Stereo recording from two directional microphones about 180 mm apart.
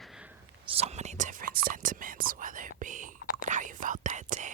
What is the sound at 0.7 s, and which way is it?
Whispering, 35° right (ahead or behind).